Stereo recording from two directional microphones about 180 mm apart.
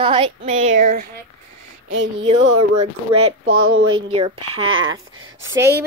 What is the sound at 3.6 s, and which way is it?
Speech, 90° right.